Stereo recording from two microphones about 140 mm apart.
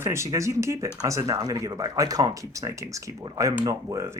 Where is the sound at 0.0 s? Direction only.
20° right (ahead or behind).